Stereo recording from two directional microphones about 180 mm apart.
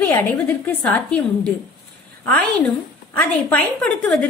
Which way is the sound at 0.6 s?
10° left (ahead or behind).